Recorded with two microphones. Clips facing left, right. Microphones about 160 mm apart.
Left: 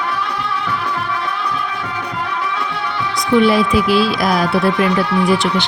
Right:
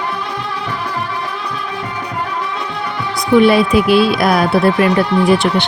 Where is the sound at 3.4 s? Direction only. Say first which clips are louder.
Right 3 dB; 60° right (ahead or behind).